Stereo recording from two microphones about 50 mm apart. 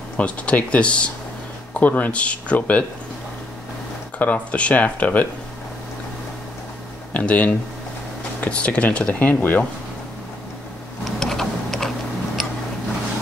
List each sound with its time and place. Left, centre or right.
0.2 s speech: left
4.2 s speech: left
7.2 s speech: left
11.1 s tick-tock: centre
12.4 s a sound: centre